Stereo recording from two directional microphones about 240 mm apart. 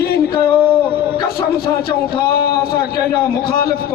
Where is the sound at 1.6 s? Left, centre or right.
Left.